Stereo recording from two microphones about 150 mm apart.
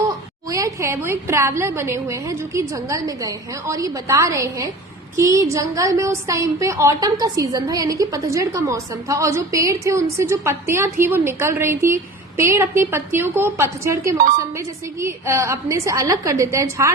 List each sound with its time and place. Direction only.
0.5 s a woman's voice: 20° right (ahead or behind)